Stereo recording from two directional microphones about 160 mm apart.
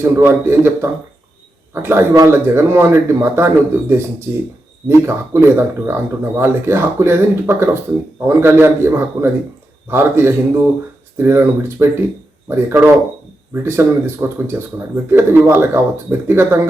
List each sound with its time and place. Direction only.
0.0 s speech: 15° right (ahead or behind)